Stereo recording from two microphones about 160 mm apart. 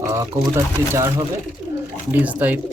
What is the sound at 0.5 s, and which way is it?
Speech, 15° right (ahead or behind).